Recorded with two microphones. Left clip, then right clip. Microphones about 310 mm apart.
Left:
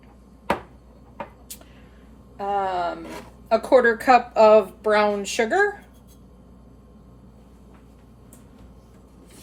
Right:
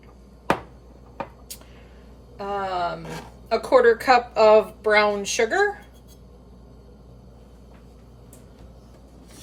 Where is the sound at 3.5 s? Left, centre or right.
Centre.